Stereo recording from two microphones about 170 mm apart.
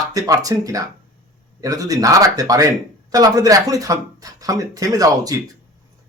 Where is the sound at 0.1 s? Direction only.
20° right (ahead or behind).